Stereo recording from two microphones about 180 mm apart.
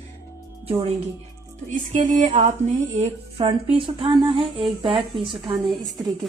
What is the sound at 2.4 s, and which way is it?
Female singing, 40° right (ahead or behind).